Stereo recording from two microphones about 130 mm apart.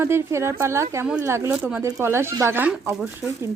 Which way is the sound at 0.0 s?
20° right (ahead or behind).